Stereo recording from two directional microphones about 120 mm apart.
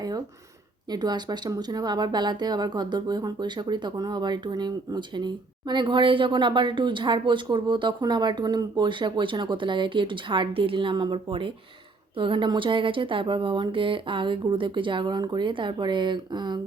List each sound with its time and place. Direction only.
0.9 s a woman's voice: 35° right (ahead or behind)